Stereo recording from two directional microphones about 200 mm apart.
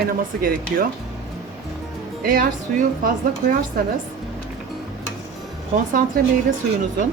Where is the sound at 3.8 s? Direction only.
50° right (ahead or behind).